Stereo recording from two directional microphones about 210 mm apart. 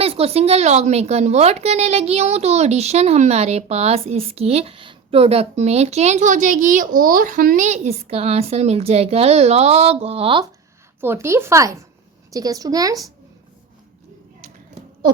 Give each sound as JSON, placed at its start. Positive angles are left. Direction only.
{"t": 0.0, "sound": "a woman's voice", "side_deg": -30}
{"t": 11.0, "sound": "speech", "side_deg": -10}